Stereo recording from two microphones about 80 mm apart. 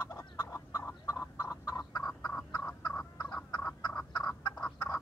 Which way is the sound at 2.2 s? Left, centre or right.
Left.